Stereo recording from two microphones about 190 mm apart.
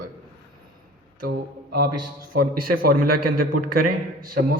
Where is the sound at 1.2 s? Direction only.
55° right (ahead or behind).